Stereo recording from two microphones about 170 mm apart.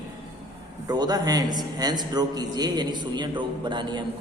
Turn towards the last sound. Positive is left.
turn(degrees=-25)  # may be behind; listen again after turning